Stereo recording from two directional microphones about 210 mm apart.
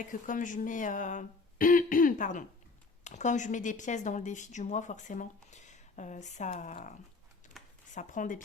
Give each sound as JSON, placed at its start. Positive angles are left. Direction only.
{"t": 0.0, "sound": "speech", "side_deg": 40}
{"t": 7.6, "sound": "a sound", "side_deg": 0}
{"t": 7.9, "sound": "speech", "side_deg": 35}